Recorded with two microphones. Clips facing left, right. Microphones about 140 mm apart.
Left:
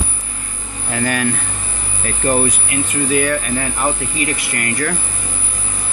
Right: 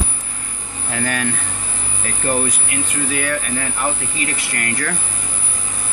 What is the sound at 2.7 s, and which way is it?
Speech, 20° left (ahead or behind).